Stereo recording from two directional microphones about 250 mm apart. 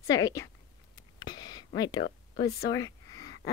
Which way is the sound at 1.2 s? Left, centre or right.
Centre.